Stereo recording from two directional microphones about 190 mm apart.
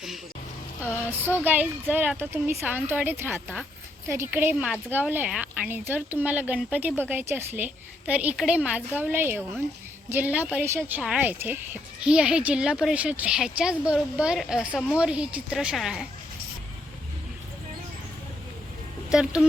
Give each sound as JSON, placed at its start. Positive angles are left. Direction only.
{"t": 1.5, "sound": "a woman's voice", "side_deg": -10}
{"t": 19.1, "sound": "a woman's voice", "side_deg": -5}